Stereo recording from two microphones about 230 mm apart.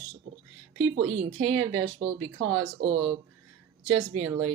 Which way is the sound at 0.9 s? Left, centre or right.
Right.